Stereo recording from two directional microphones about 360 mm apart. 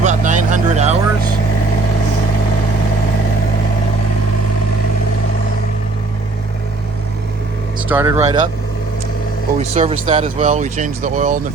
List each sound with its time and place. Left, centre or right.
0.0 s vehicle: centre
7.9 s speech: centre
9.7 s speech: centre